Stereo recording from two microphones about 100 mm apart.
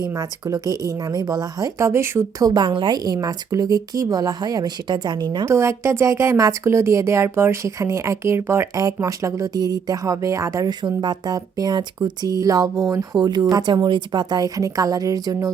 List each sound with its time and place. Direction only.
0.2 s speech: 40° right (ahead or behind)
1.9 s speech: 30° right (ahead or behind)
2.5 s a woman's voice: 45° right (ahead or behind)
5.5 s speech: 30° right (ahead or behind)
10.8 s speech: 45° right (ahead or behind)